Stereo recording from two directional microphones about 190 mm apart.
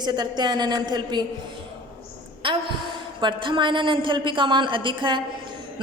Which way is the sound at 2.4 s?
25° right (ahead or behind).